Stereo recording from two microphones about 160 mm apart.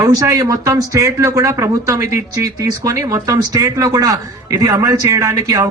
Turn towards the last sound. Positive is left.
turn(degrees=-20)  # may be behind; listen again after turning